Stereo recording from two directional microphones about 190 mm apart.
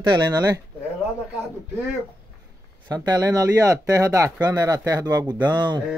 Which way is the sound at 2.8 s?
20° right (ahead or behind).